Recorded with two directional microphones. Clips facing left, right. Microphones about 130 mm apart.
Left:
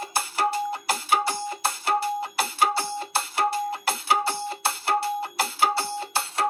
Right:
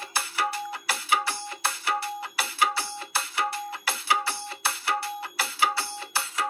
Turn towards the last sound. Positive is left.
turn(degrees=50)  # may be behind; listen again after turning